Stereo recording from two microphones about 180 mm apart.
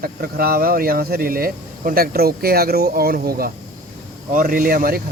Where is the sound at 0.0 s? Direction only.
55° right (ahead or behind).